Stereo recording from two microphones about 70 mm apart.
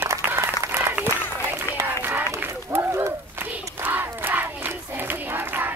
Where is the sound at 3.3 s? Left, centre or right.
Right.